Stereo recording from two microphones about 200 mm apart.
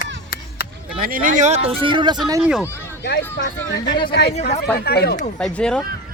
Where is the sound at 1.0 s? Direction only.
45° right (ahead or behind); by 2.4 s 20° right (ahead or behind).